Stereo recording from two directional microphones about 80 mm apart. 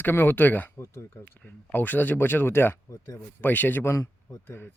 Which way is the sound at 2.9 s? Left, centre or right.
Left.